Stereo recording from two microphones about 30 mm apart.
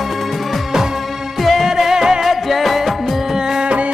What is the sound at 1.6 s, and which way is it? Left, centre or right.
Music, centre.